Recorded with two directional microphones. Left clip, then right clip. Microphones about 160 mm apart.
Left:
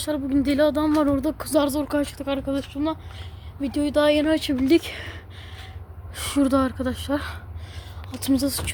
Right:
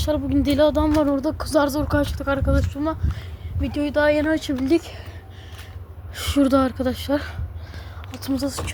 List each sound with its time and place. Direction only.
0.0 s a woman's voice: 5° left (ahead or behind)
0.9 s speech: 15° left (ahead or behind)
3.6 s speech: 25° left (ahead or behind); by 5.1 s 45° left (ahead or behind)
6.1 s a woman's voice: centre (ahead or behind)
8.2 s speech: 40° left (ahead or behind)
8.4 s speech: 25° left (ahead or behind)